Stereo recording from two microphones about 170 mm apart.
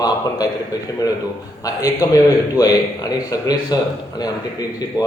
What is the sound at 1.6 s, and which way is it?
A man's voice, 20° left (ahead or behind).